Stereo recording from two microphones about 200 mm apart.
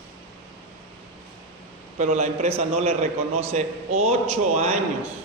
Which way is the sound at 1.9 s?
35° right (ahead or behind).